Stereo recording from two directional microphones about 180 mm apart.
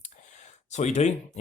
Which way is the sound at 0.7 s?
40° left (ahead or behind).